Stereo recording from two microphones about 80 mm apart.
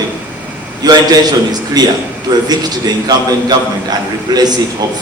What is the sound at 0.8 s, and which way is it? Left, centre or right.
A man's voice, right.